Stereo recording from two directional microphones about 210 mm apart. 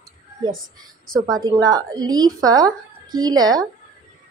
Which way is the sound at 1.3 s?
20° right (ahead or behind).